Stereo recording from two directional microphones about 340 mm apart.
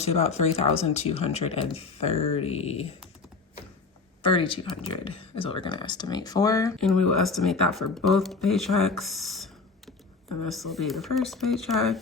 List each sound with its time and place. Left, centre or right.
0.0 s speech: centre
4.2 s speech: centre